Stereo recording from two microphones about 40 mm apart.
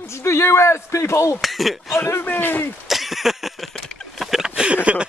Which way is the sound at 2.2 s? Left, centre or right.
Left.